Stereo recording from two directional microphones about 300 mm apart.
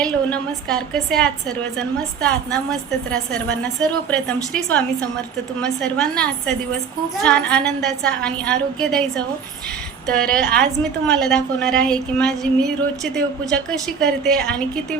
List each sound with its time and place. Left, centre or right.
0.0 s a woman's voice: centre
3.1 s a woman's voice: centre
10.2 s a woman's voice: centre